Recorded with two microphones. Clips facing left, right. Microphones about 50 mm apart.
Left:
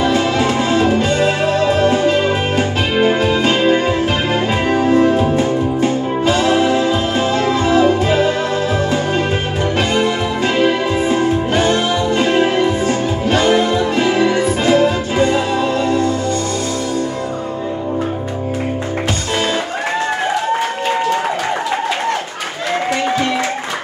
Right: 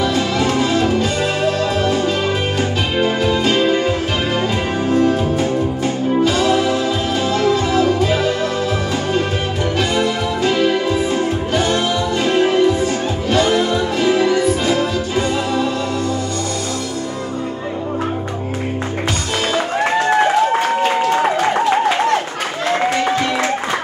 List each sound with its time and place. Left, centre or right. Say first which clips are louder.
0.0 s music: left 2 dB; left
9.8 s music: left 2 dB; left